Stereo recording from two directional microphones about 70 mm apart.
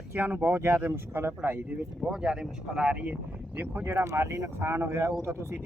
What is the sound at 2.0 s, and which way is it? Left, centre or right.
Speech, centre.